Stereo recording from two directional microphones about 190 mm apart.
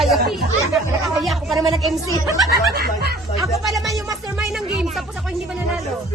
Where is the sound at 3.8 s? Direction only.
20° right (ahead or behind).